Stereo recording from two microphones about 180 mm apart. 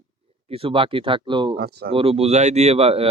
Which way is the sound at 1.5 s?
65° right (ahead or behind).